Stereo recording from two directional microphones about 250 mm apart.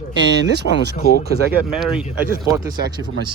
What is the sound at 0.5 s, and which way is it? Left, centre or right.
Speech, right.